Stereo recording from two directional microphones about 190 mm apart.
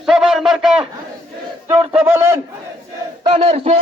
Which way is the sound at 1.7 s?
10° right (ahead or behind).